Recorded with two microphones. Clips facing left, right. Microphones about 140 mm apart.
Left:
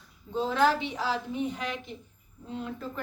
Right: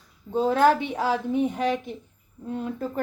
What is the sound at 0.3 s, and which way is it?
A woman's voice, 50° right (ahead or behind).